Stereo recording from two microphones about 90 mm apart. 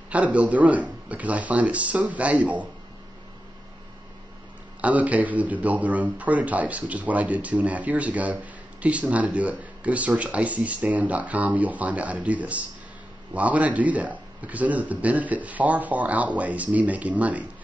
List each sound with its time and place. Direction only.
0.1 s a man's voice: 15° right (ahead or behind)
4.8 s a man's voice: 15° right (ahead or behind)